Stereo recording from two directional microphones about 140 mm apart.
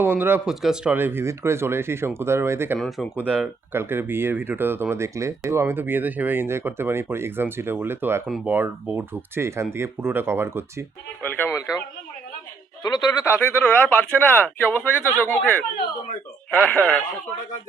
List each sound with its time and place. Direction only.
0.0 s speech: 15° right (ahead or behind)
0.9 s speech: 15° right (ahead or behind)
2.7 s speech: 5° left (ahead or behind)
3.2 s speech: 10° right (ahead or behind)
11.2 s speech: 15° left (ahead or behind)
12.8 s speech: 25° left (ahead or behind)
16.6 s speech: 10° left (ahead or behind)